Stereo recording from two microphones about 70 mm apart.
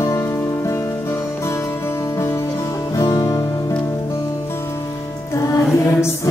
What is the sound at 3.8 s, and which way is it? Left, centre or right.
Music, left.